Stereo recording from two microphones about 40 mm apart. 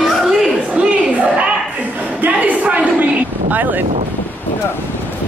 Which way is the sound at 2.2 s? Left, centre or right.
Right.